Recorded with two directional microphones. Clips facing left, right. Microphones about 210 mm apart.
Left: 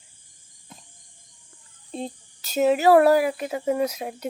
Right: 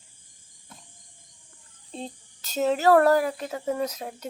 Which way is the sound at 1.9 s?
10° left (ahead or behind).